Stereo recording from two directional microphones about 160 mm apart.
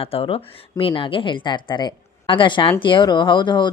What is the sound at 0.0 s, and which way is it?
Speech, 35° left (ahead or behind).